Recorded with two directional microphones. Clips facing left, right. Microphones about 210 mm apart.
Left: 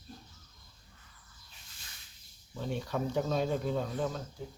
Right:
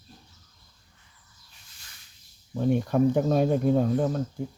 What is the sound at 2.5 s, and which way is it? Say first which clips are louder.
Speech: right 12 dB; 50° right (ahead or behind).